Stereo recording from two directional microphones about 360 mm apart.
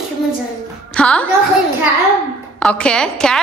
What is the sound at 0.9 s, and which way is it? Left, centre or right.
Speech, centre.